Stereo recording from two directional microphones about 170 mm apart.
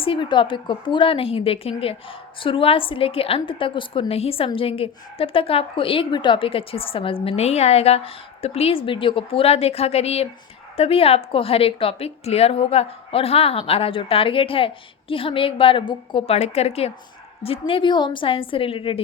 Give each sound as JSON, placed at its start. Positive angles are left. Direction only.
{"t": 0.0, "sound": "a woman's voice", "side_deg": 30}